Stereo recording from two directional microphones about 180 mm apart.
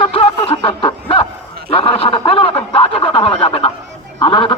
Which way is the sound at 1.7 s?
30° left (ahead or behind).